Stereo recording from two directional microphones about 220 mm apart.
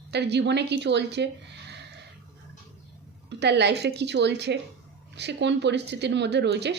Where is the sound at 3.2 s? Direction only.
50° right (ahead or behind).